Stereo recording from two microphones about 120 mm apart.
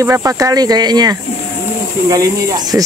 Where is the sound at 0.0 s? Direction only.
25° right (ahead or behind).